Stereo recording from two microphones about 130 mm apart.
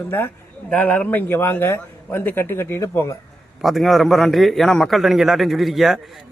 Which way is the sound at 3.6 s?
Centre (ahead or behind).